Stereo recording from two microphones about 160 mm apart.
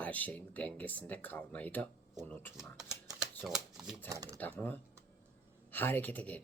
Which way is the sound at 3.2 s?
5° right (ahead or behind).